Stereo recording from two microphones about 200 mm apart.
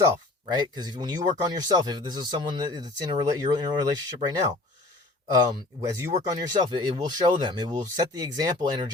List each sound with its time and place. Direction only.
0.5 s speech: 20° right (ahead or behind)